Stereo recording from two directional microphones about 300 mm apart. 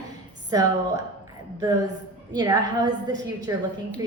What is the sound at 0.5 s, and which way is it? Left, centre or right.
A woman's voice, centre.